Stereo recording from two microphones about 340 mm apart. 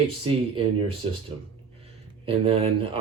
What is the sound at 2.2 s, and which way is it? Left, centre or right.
Speech, centre.